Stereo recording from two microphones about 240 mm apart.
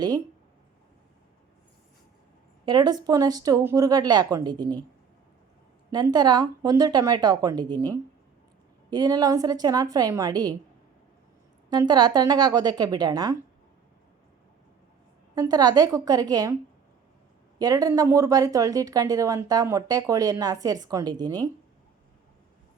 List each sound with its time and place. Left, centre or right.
2.6 s a woman's voice: centre
5.9 s a woman's voice: centre
11.7 s a woman's voice: centre
15.4 s a woman's voice: centre
17.6 s a woman's voice: centre